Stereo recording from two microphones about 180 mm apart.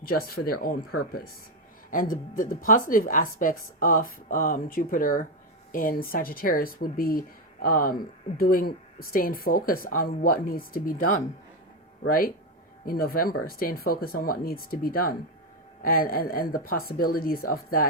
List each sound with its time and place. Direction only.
0.0 s speech: 55° left (ahead or behind)